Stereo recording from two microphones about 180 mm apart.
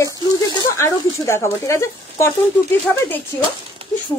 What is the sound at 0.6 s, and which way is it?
Speech, 15° left (ahead or behind).